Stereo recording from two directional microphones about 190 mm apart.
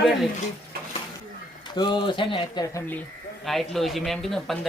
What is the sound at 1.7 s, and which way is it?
Speech, 25° left (ahead or behind).